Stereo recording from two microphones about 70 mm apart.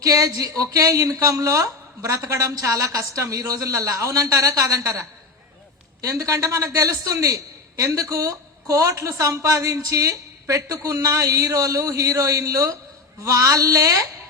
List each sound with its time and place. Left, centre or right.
0.0 s a man's voice: right